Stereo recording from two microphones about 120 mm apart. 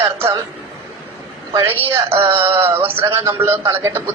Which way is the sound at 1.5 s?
20° right (ahead or behind).